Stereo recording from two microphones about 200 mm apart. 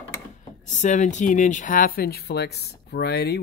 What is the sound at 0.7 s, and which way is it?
Speech, 35° left (ahead or behind).